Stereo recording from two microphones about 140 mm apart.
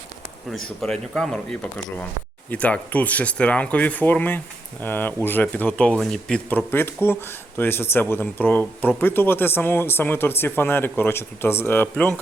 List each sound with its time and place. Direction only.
0.8 s speech: 5° left (ahead or behind)
6.7 s speech: 15° left (ahead or behind)